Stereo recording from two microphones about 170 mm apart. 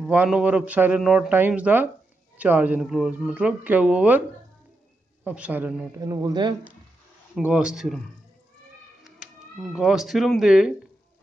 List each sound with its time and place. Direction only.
0.1 s speech: 10° right (ahead or behind)
5.2 s speech: 10° right (ahead or behind)
5.9 s a man's voice: 20° right (ahead or behind)
7.3 s speech: 5° right (ahead or behind)